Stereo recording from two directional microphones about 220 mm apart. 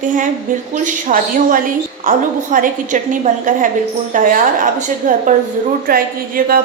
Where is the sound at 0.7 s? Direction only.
35° right (ahead or behind).